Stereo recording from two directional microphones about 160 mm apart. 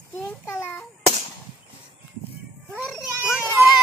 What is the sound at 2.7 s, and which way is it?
Speech, 5° right (ahead or behind).